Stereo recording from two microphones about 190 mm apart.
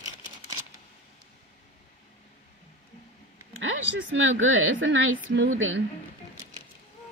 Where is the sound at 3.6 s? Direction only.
85° right.